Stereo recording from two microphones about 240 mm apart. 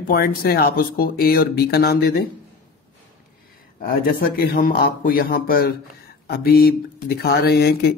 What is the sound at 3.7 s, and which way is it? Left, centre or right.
Speech, left.